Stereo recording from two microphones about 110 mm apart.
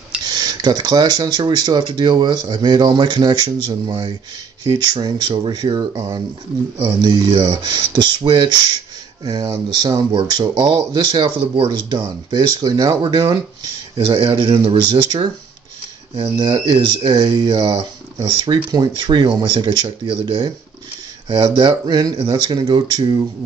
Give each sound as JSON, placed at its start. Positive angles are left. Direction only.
{"t": 0.2, "sound": "speech", "side_deg": -40}